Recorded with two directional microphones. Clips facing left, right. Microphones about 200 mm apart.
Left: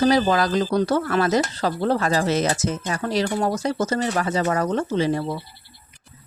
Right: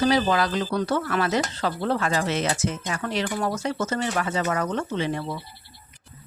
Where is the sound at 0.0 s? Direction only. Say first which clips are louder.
Left 3 dB; 40° left (ahead or behind).